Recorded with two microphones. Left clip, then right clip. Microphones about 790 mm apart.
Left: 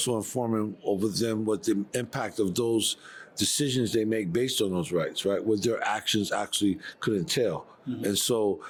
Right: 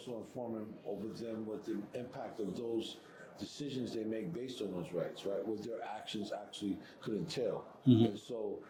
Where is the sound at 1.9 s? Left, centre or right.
Left.